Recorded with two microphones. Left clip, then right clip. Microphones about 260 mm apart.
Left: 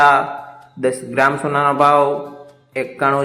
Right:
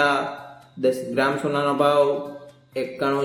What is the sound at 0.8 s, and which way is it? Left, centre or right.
A man's voice, centre.